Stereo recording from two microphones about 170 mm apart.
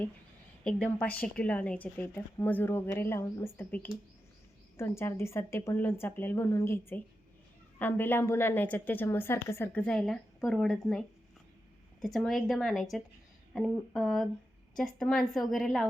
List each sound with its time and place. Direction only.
0.6 s a woman's voice: 5° left (ahead or behind)